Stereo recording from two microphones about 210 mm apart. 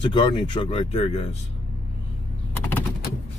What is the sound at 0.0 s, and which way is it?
Speech, 25° left (ahead or behind).